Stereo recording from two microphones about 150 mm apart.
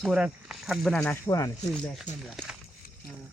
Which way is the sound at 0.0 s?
5° right (ahead or behind).